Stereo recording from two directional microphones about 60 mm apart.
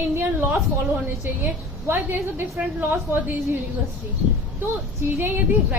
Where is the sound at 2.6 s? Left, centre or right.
Right.